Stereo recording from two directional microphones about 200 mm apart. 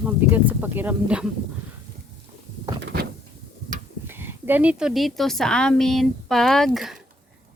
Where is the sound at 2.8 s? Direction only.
60° right (ahead or behind).